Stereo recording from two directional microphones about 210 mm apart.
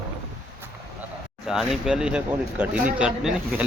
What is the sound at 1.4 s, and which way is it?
Speech, centre (ahead or behind).